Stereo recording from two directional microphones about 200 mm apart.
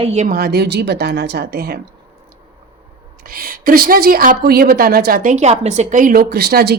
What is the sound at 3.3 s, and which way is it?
A woman's voice, 45° right (ahead or behind).